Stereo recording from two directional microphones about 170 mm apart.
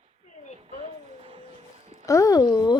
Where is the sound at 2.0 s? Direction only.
20° left (ahead or behind).